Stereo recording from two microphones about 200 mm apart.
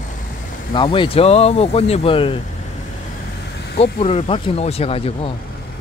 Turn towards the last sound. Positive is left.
turn(degrees=30)  # may be behind; listen again after turning